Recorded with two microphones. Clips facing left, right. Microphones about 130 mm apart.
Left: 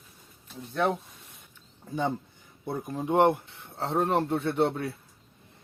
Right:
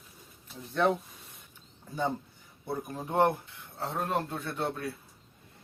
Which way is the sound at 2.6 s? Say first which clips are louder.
Left 5 dB; 20° left (ahead or behind).